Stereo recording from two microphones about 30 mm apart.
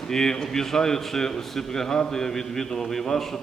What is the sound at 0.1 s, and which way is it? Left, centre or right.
A man's voice, centre.